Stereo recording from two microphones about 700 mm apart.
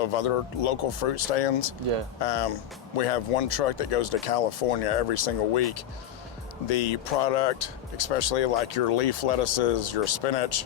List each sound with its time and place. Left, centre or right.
0.0 s speech: left